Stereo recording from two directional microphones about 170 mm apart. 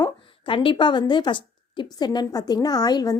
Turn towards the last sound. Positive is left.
turn(degrees=20)  # may be behind; listen again after turning